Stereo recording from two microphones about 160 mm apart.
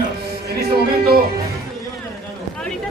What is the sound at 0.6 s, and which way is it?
Music, 70° right (ahead or behind).